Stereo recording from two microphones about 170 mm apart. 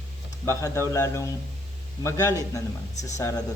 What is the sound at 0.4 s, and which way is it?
A man's voice, 15° left (ahead or behind).